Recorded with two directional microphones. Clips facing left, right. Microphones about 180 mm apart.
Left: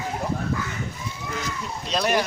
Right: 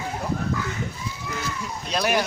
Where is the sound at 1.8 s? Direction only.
Centre (ahead or behind).